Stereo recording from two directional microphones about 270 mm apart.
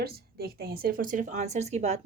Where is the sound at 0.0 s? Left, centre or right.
Right.